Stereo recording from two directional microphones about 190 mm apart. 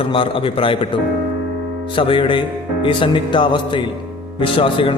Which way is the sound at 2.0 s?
25° left (ahead or behind).